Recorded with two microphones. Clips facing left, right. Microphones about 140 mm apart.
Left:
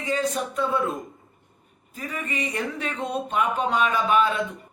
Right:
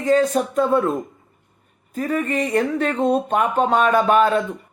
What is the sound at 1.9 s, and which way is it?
A woman's voice, 50° right (ahead or behind).